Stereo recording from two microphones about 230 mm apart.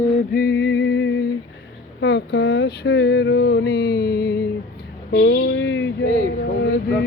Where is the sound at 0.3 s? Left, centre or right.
Left.